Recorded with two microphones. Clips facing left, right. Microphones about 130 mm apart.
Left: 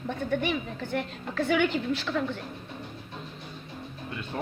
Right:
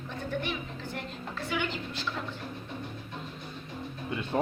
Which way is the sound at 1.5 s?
65° left (ahead or behind).